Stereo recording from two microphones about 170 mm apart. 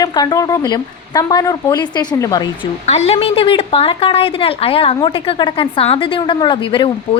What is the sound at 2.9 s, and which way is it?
A woman's voice, 40° left (ahead or behind).